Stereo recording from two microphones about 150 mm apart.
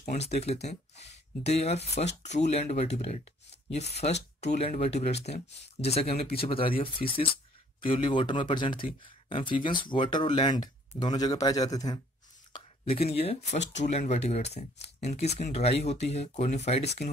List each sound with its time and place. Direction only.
0.0 s speech: 50° left (ahead or behind); by 12.0 s 25° left (ahead or behind)
12.5 s speech: 40° left (ahead or behind)